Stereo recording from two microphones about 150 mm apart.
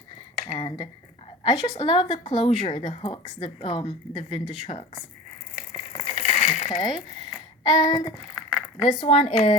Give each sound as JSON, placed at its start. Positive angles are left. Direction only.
{"t": 1.5, "sound": "child singing", "side_deg": 25}
{"t": 1.9, "sound": "a woman's voice", "side_deg": 35}
{"t": 6.0, "sound": "a sound", "side_deg": 45}
{"t": 7.6, "sound": "child singing", "side_deg": 25}
{"t": 8.4, "sound": "a sound", "side_deg": -5}
{"t": 8.9, "sound": "a woman's voice", "side_deg": 40}